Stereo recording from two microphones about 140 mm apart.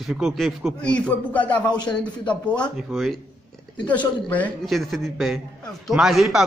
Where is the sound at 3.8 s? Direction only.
10° left (ahead or behind).